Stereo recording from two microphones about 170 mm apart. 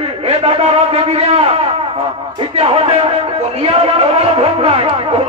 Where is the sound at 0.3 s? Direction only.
35° right (ahead or behind).